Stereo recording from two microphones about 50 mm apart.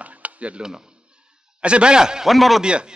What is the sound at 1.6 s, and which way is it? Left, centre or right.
Speech, centre.